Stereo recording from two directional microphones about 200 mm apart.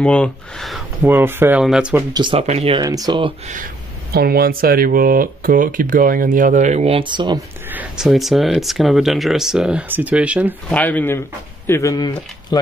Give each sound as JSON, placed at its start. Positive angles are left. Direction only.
{"t": 0.0, "sound": "speech", "side_deg": 5}
{"t": 1.0, "sound": "speech", "side_deg": -10}
{"t": 2.1, "sound": "speech", "side_deg": -25}
{"t": 2.8, "sound": "speech", "side_deg": -20}
{"t": 4.1, "sound": "speech", "side_deg": -50}
{"t": 7.7, "sound": "speech", "side_deg": -5}
{"t": 10.7, "sound": "a man's voice", "side_deg": 10}